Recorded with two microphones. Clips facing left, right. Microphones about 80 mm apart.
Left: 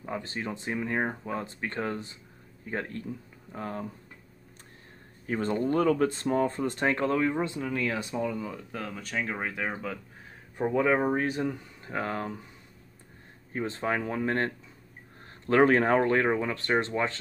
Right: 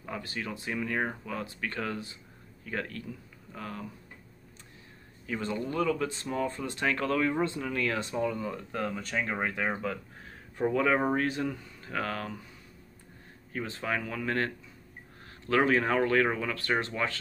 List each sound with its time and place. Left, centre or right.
0.0 s speech: left
5.2 s speech: left
7.0 s speech: centre
10.7 s speech: centre
13.5 s speech: left
16.0 s speech: left